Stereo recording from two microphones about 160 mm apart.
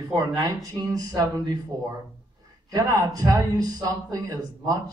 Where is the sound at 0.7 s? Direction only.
25° right (ahead or behind).